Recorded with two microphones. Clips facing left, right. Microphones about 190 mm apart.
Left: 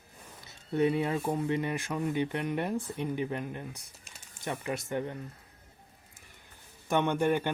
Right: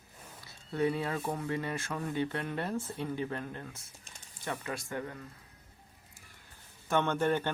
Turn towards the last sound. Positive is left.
turn(degrees=15)  # may be behind; listen again after turning